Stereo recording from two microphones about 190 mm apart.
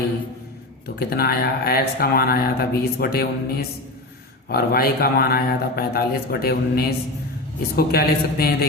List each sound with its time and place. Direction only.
0.9 s speech: 55° left (ahead or behind)